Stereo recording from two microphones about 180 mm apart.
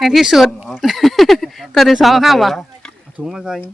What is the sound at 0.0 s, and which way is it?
Speech, centre (ahead or behind).